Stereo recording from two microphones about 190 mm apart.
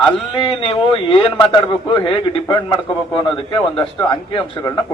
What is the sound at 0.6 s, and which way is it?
A man's voice, 30° left (ahead or behind).